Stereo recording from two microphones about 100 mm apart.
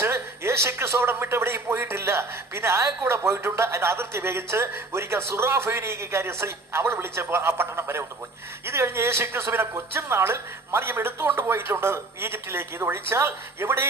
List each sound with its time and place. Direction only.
0.0 s speech: 25° right (ahead or behind)